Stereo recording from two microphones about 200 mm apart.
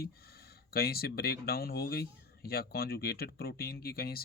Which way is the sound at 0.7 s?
50° left (ahead or behind).